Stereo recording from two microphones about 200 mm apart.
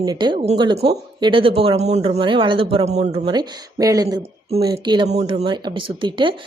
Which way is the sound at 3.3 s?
20° right (ahead or behind).